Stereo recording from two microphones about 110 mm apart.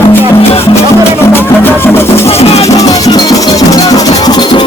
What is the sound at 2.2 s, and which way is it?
Music, 70° left (ahead or behind).